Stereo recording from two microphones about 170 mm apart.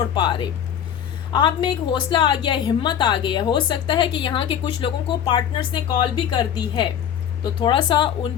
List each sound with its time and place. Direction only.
0.0 s a woman's voice: 25° left (ahead or behind)